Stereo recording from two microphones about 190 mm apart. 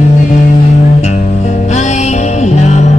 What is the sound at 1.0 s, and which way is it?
Music, 35° left (ahead or behind).